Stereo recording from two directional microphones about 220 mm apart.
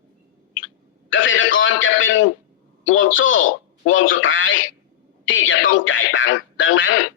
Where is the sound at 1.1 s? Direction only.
60° left (ahead or behind).